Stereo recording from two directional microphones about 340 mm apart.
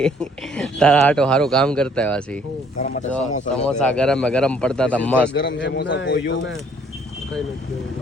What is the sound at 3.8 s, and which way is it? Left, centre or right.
Speech, centre.